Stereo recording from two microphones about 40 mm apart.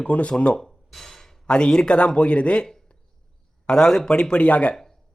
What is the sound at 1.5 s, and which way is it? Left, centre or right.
Speech, left.